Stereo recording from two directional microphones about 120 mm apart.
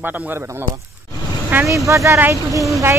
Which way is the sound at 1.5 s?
20° right (ahead or behind).